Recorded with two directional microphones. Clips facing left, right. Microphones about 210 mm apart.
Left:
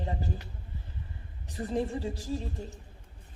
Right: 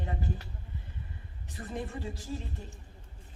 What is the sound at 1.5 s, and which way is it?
Speech, 30° left (ahead or behind).